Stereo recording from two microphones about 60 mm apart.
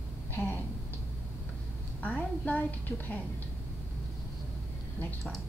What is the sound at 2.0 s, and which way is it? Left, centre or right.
A woman's voice, left.